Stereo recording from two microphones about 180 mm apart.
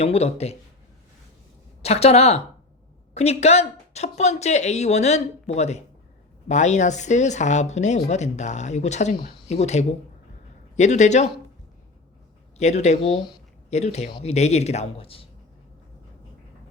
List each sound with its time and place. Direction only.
0.0 s speech: 35° left (ahead or behind)
1.8 s speech: 35° left (ahead or behind)
12.5 s speech: 40° left (ahead or behind)